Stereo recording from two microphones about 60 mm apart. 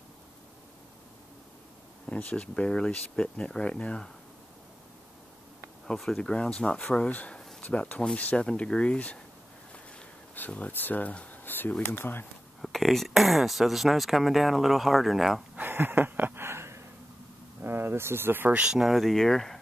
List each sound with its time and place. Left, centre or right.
2.0 s speech: left
5.9 s speech: centre; by 8.5 s left
8.5 s speech: centre
10.3 s speech: left
12.6 s speech: centre
15.5 s a sound: right
17.6 s a sound: right
18.5 s speech: centre